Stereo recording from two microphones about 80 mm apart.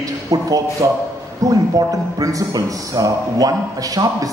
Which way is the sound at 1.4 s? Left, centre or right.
Right.